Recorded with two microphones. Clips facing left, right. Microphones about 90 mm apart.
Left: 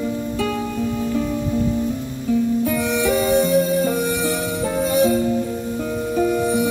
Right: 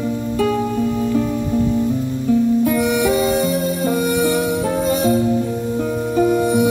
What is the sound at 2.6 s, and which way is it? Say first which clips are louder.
Music: right 4 dB; 5° right (ahead or behind).